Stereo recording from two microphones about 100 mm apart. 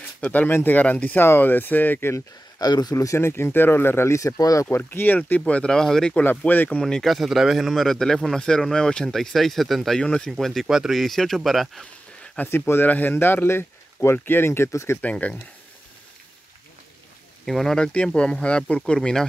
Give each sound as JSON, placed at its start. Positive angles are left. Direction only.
{"t": 0.0, "sound": "speech", "side_deg": 15}
{"t": 2.6, "sound": "speech", "side_deg": 40}
{"t": 4.6, "sound": "speech", "side_deg": 20}
{"t": 6.8, "sound": "speech", "side_deg": 5}
{"t": 12.4, "sound": "speech", "side_deg": 25}
{"t": 15.0, "sound": "speech", "side_deg": 15}
{"t": 17.5, "sound": "speech", "side_deg": 5}